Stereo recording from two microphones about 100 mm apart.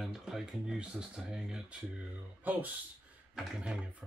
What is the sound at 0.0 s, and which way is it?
Speech, 5° right (ahead or behind).